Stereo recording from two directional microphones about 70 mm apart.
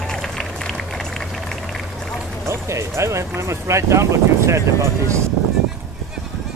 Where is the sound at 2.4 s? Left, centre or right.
Right.